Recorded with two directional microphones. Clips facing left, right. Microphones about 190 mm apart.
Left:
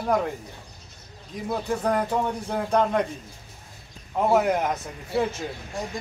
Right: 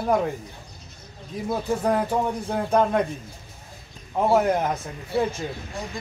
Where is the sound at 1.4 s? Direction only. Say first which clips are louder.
Right 2 dB; 5° right (ahead or behind).